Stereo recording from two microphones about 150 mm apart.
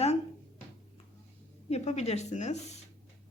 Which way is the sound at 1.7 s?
45° left (ahead or behind).